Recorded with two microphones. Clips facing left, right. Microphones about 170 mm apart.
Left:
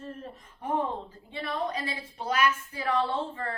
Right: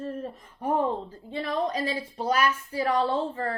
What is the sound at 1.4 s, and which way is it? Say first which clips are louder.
A woman's voice: right 4 dB; 35° right (ahead or behind).